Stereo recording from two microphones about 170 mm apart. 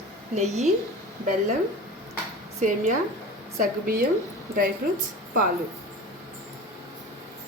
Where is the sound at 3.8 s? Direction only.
55° right (ahead or behind).